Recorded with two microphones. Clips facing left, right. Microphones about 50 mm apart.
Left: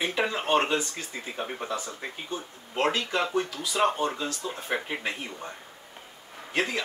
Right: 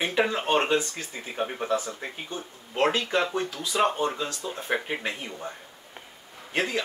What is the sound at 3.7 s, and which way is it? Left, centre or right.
Speech, centre.